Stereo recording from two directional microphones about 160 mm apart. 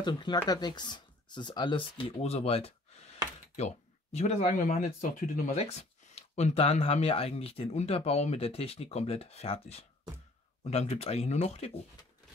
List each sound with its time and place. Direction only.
0.0 s speech: 30° left (ahead or behind)